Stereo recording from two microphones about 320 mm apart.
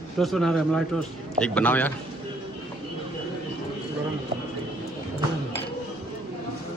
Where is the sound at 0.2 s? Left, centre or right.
Centre.